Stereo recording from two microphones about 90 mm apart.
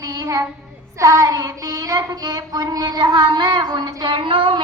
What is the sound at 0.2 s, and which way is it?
Speech, 40° right (ahead or behind).